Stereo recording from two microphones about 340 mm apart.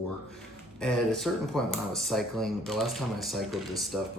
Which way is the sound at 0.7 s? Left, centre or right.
Centre.